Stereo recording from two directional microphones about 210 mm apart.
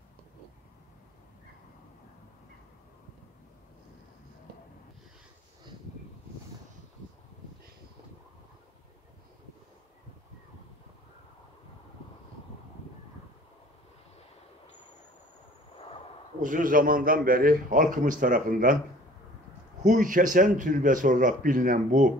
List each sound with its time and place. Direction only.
16.3 s a man's voice: 40° right (ahead or behind)
19.8 s a man's voice: 40° right (ahead or behind)